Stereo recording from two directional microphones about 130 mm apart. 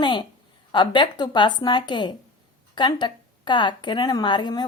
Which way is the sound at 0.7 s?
35° left (ahead or behind).